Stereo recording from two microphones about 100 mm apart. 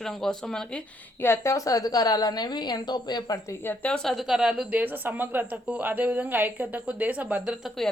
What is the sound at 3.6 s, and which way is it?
A woman's voice, 15° left (ahead or behind).